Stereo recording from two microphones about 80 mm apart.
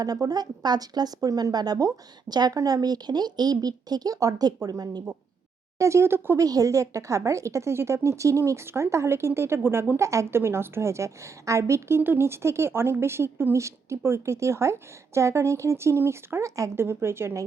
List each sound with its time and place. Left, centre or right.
0.0 s speech: right
5.8 s a woman's voice: right
6.4 s a woman's voice: right
10.0 s a woman's voice: right